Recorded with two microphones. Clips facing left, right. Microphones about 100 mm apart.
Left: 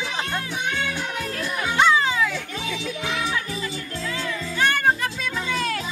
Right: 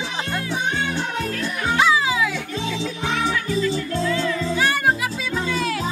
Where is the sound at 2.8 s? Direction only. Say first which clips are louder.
Right 4 dB; 30° right (ahead or behind).